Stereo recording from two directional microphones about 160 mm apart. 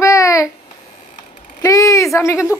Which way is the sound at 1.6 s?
20° left (ahead or behind).